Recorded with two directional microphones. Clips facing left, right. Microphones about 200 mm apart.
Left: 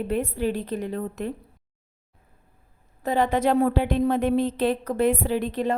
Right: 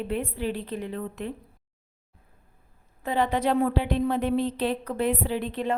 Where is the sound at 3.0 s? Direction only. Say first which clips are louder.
Left 3 dB; 45° left (ahead or behind).